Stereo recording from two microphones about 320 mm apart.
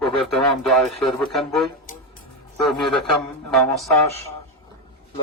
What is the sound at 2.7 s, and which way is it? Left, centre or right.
Speech, centre.